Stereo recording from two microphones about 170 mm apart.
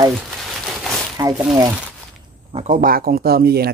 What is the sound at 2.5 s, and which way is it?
Speech, 45° right (ahead or behind).